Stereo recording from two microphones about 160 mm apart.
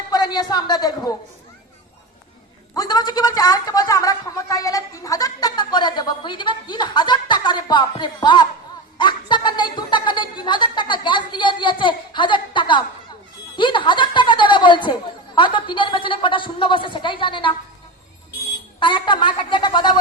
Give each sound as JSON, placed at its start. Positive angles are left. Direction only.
{"t": 0.1, "sound": "speech", "side_deg": 25}
{"t": 2.7, "sound": "a man's voice", "side_deg": 25}
{"t": 18.8, "sound": "a man's voice", "side_deg": 30}